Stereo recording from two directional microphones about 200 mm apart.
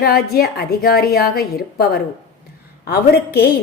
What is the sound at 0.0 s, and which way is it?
A woman's voice, 50° left (ahead or behind).